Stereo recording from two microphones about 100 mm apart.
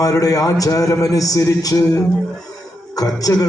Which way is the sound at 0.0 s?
35° left (ahead or behind).